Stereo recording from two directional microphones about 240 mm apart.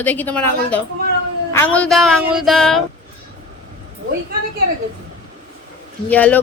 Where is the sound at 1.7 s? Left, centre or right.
Centre.